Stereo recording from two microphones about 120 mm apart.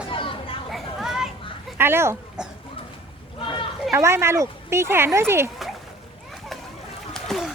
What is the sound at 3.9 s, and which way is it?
Speech, 20° right (ahead or behind).